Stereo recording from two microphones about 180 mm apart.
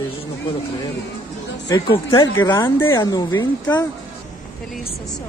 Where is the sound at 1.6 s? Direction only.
25° left (ahead or behind).